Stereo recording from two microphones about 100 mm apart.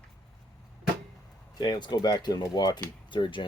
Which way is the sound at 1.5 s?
45° left (ahead or behind).